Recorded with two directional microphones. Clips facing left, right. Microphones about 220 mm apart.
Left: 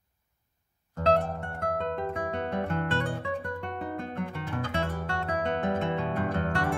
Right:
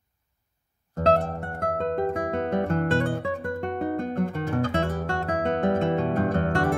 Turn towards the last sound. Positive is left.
turn(degrees=-45)  # may be behind; listen again after turning